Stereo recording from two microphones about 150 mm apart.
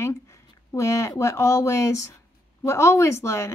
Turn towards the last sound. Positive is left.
turn(degrees=20)  # may be behind; listen again after turning